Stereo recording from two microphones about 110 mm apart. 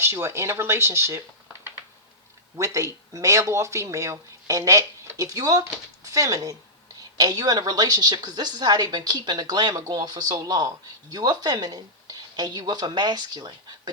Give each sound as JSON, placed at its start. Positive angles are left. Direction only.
{"t": 0.0, "sound": "speech", "side_deg": -25}
{"t": 2.6, "sound": "a woman's voice", "side_deg": -25}